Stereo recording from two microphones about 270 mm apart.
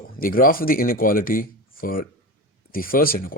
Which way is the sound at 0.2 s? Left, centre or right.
Left.